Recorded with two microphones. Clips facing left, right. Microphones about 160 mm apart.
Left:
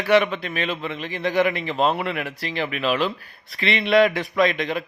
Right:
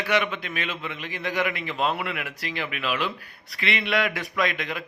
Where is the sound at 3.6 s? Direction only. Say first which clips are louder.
Left 8 dB; 25° left (ahead or behind).